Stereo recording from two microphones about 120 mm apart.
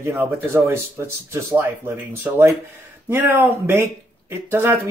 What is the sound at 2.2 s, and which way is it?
Speech, 20° right (ahead or behind).